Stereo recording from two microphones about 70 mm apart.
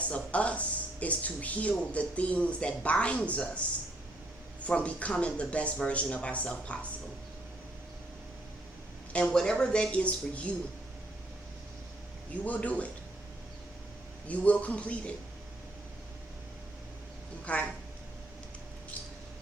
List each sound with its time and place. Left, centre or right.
0.1 s speech: centre
4.6 s speech: centre
9.1 s speech: centre
12.3 s speech: left
14.3 s speech: left
17.4 s speech: centre